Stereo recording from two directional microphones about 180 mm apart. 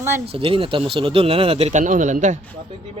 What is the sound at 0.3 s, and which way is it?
Speech, 30° right (ahead or behind).